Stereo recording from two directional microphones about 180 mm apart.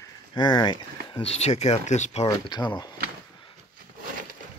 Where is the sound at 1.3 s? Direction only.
35° left (ahead or behind).